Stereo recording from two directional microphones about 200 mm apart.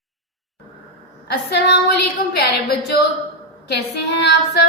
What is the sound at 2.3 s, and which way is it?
A woman's voice, 55° left (ahead or behind).